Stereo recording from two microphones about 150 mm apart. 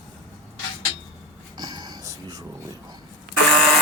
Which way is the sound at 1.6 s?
25° right (ahead or behind).